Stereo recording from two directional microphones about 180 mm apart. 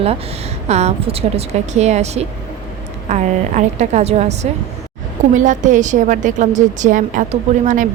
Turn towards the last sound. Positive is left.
turn(degrees=-45)  # may be behind; listen again after turning